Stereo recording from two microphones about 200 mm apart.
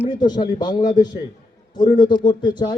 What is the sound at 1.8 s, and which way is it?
Speech, 45° left (ahead or behind).